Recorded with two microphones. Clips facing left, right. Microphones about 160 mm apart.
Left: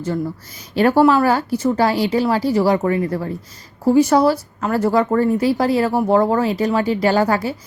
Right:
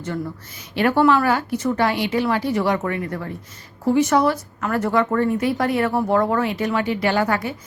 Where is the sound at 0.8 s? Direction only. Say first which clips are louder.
Left 3 dB; 35° left (ahead or behind).